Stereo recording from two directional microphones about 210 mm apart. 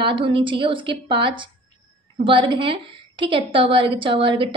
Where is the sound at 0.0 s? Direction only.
25° right (ahead or behind).